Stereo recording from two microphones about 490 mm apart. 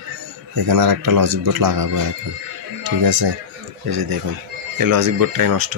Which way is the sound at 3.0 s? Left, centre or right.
Right.